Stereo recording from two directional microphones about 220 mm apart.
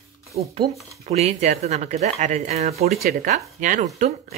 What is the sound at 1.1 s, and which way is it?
Speech, 30° right (ahead or behind).